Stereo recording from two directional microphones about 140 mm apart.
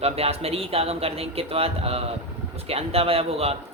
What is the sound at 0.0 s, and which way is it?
Speech, 45° right (ahead or behind).